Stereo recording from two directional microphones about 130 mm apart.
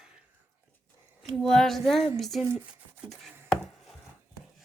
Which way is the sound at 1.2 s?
5° left (ahead or behind).